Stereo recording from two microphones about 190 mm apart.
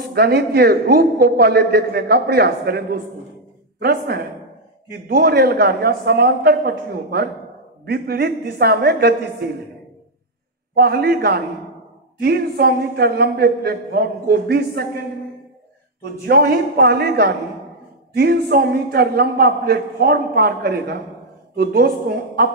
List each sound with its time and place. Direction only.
0.1 s a man's voice: 55° right (ahead or behind)
10.7 s a man's voice: 55° right (ahead or behind)
16.0 s a man's voice: 55° right (ahead or behind)